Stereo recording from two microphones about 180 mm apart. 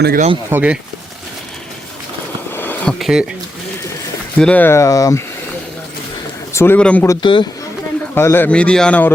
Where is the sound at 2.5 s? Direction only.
10° left (ahead or behind).